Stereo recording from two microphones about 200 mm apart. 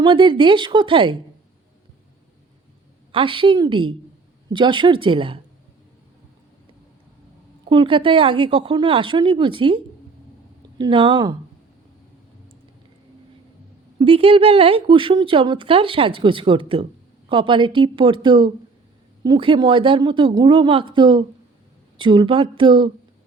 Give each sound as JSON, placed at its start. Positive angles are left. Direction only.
{"t": 0.0, "sound": "speech", "side_deg": -25}
{"t": 3.1, "sound": "speech", "side_deg": -25}
{"t": 7.7, "sound": "speech", "side_deg": -25}
{"t": 14.0, "sound": "speech", "side_deg": -25}